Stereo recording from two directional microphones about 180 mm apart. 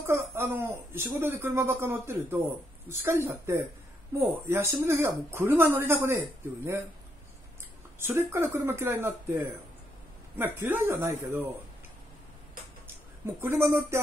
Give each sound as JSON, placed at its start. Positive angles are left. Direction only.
{"t": 0.0, "sound": "speech", "side_deg": -15}
{"t": 8.0, "sound": "speech", "side_deg": -10}
{"t": 13.4, "sound": "speech", "side_deg": -15}